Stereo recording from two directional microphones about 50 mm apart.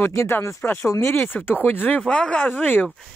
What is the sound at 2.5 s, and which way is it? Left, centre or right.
Speech, left.